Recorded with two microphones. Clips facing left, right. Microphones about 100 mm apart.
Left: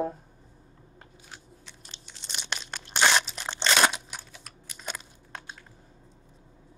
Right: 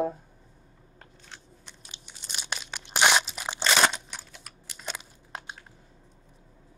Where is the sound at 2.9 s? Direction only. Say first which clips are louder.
Right 1 dB; 15° right (ahead or behind).